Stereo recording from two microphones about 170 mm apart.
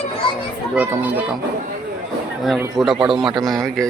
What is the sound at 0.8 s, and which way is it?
Speech, 10° right (ahead or behind).